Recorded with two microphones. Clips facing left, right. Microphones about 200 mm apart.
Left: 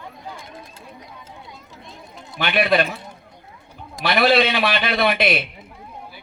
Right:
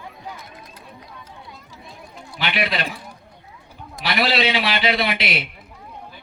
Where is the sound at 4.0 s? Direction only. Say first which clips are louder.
Left 4 dB; 55° left (ahead or behind).